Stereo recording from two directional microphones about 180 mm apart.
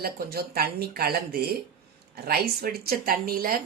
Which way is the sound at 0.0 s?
60° right (ahead or behind).